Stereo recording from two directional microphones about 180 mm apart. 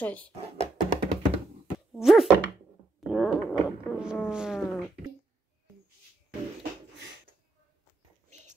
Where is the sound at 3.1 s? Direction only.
5° right (ahead or behind).